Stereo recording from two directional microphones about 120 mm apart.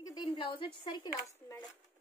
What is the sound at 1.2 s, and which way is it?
Speech, 25° left (ahead or behind).